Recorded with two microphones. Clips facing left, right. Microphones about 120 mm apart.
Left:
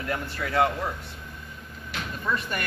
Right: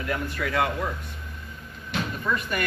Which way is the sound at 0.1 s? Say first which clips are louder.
Right 1 dB; 25° left (ahead or behind).